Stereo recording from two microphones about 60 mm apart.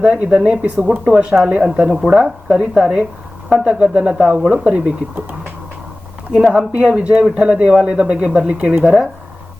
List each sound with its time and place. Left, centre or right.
0.0 s speech: centre
6.3 s speech: centre